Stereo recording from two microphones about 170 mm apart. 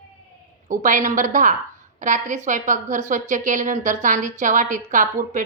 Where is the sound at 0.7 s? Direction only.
50° right (ahead or behind).